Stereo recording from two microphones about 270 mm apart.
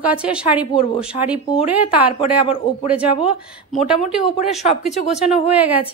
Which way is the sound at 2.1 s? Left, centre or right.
Centre.